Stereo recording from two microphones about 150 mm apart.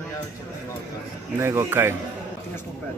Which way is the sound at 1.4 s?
20° right (ahead or behind).